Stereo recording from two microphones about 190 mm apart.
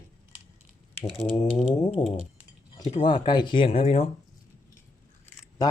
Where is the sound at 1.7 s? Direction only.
20° left (ahead or behind).